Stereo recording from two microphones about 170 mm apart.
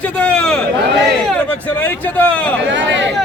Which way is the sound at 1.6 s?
10° left (ahead or behind).